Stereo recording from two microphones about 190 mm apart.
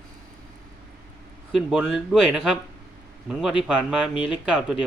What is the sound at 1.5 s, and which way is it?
Speech, centre (ahead or behind).